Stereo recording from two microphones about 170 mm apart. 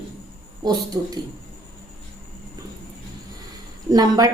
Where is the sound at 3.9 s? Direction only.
20° right (ahead or behind).